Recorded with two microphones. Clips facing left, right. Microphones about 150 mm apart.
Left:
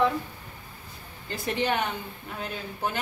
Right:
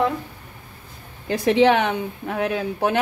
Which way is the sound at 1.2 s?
85° right.